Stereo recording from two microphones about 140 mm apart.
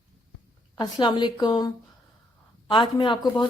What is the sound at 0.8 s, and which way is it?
Speech, 35° left (ahead or behind).